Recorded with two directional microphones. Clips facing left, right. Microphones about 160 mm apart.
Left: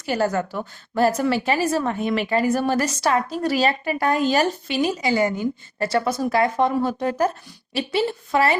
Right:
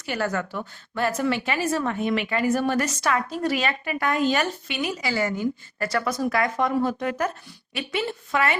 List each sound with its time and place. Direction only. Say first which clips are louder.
0.0 s a woman's voice: left 5 dB; 35° left (ahead or behind)